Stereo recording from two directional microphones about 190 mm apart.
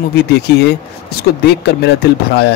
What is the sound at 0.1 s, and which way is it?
A man's voice, 60° left (ahead or behind).